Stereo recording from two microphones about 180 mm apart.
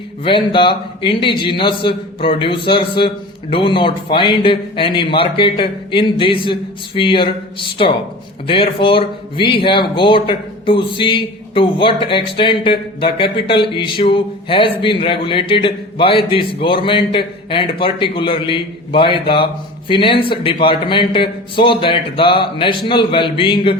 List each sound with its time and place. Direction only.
0.3 s a man's voice: 30° left (ahead or behind)